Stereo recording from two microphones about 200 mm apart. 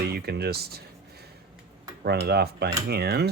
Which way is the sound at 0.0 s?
55° right (ahead or behind).